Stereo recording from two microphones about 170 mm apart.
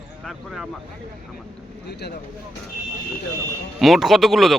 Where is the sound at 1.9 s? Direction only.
75° left (ahead or behind).